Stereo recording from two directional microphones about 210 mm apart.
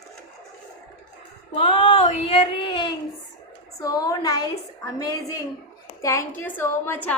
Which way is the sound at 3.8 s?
15° left (ahead or behind).